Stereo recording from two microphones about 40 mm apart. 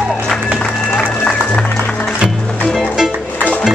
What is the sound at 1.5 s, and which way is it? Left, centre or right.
Music, left.